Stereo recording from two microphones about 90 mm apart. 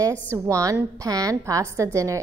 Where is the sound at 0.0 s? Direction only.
35° right (ahead or behind).